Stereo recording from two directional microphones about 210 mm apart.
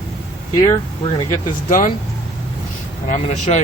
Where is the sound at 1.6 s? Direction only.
40° left (ahead or behind).